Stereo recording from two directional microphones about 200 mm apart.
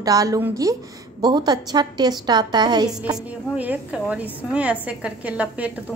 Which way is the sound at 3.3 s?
5° right (ahead or behind).